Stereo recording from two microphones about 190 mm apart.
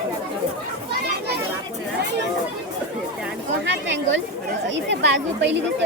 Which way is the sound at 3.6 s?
70° right (ahead or behind).